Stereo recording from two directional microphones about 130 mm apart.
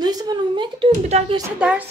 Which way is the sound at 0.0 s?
30° right (ahead or behind).